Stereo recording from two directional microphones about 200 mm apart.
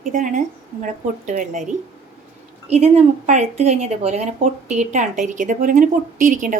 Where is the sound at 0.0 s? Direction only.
40° right (ahead or behind).